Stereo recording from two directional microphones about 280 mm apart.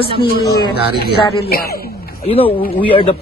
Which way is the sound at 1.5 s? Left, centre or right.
Left.